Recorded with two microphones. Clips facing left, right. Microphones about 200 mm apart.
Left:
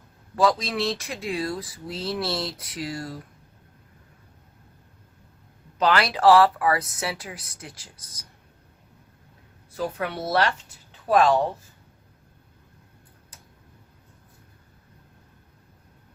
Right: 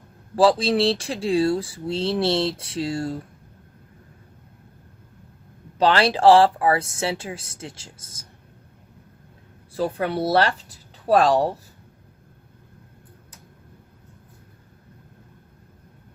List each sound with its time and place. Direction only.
0.3 s speech: 30° right (ahead or behind)
5.7 s speech: 30° right (ahead or behind)
9.7 s speech: 30° right (ahead or behind)